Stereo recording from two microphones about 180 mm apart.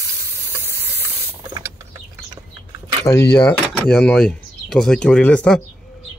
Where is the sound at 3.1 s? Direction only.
15° left (ahead or behind).